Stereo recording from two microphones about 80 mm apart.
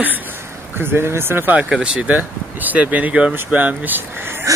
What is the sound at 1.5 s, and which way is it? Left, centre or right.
Speech, centre.